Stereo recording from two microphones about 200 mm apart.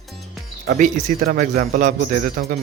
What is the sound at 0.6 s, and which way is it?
A man's voice, 40° right (ahead or behind).